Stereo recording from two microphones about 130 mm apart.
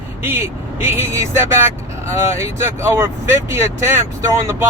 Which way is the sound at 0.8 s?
20° right (ahead or behind).